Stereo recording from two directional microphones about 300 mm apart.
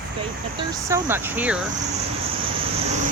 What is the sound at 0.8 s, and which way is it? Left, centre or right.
Speech, centre.